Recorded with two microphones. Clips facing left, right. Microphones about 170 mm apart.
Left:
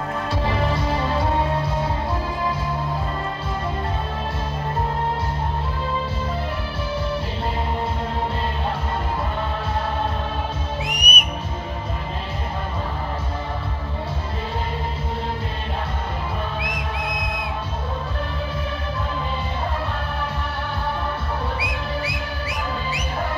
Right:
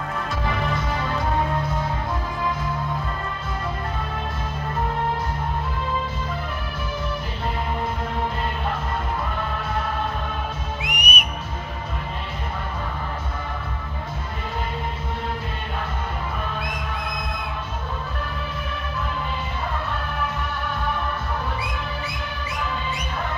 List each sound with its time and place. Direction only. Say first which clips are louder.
10.8 s music: left 2 dB; 40° left (ahead or behind)